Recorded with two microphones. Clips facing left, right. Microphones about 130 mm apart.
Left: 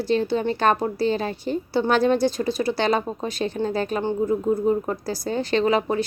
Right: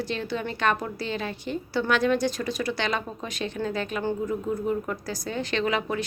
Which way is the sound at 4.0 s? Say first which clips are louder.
Left 5 dB; 25° left (ahead or behind).